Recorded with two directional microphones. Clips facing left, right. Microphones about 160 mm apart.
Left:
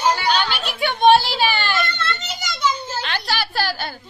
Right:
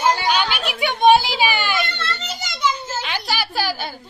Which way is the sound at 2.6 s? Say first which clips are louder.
Even; centre (ahead or behind).